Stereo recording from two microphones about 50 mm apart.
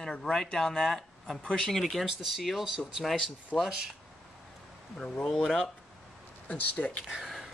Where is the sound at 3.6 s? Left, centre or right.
Centre.